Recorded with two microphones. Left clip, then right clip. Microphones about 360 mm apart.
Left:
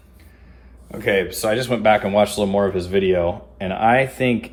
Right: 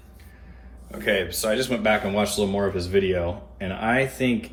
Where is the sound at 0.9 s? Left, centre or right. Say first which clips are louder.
Left 4 dB; centre.